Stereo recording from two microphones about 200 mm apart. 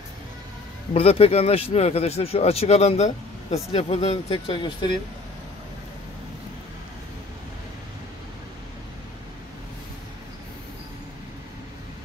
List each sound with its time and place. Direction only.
0.9 s speech: 30° left (ahead or behind)